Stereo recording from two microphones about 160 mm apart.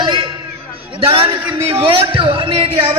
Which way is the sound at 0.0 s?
30° right (ahead or behind).